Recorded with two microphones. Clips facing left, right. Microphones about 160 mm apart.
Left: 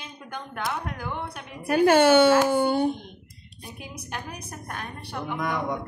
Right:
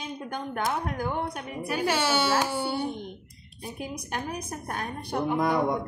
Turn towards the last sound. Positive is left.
turn(degrees=-35)  # may be behind; listen again after turning